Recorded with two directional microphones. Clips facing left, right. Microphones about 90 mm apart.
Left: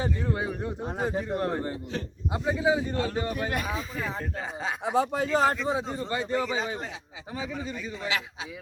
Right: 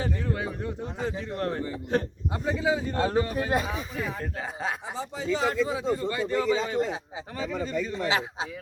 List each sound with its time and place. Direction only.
0.0 s speech: 20° left (ahead or behind)
1.9 s a man's voice: 50° right (ahead or behind)
2.5 s speech: 15° left (ahead or behind)
2.9 s a man's voice: 35° right (ahead or behind)
4.2 s speech: centre (ahead or behind)
4.9 s speech: 55° left (ahead or behind)
5.6 s speech: 25° left (ahead or behind)
7.3 s speech: 5° left (ahead or behind)
8.0 s a man's voice: 30° right (ahead or behind)